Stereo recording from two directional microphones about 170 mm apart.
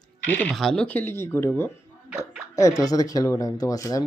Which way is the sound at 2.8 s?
20° left (ahead or behind).